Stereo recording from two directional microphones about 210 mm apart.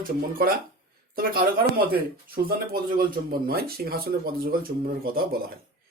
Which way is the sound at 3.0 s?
45° right (ahead or behind).